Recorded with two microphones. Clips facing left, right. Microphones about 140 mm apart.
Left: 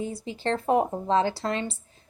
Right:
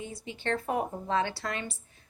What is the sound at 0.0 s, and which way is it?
A woman's voice, 35° left (ahead or behind).